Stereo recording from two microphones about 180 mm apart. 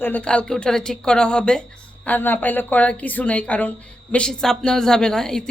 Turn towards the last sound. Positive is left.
turn(degrees=5)  # may be behind; listen again after turning